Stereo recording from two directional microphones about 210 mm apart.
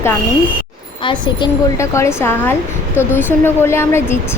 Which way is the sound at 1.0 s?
20° left (ahead or behind).